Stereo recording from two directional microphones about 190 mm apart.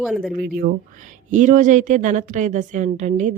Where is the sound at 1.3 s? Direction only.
40° right (ahead or behind).